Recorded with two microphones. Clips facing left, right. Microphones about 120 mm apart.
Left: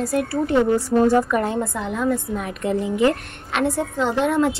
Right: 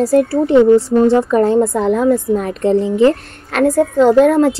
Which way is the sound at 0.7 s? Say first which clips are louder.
Right 6 dB; 20° right (ahead or behind).